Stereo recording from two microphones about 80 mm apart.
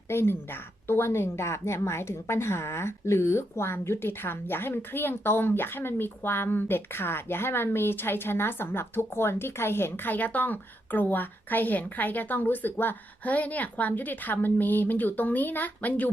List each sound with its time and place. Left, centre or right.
0.1 s a woman's voice: left